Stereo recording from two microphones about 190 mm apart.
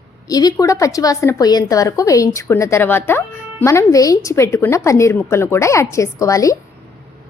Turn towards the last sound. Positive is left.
turn(degrees=15)  # may be behind; listen again after turning